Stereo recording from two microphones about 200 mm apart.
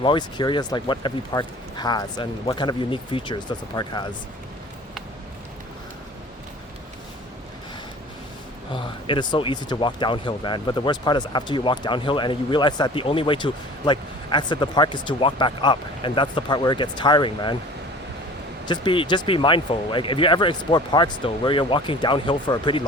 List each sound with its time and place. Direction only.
0.0 s speech: 25° left (ahead or behind)
8.7 s speech: 25° left (ahead or behind)
18.6 s speech: 25° left (ahead or behind)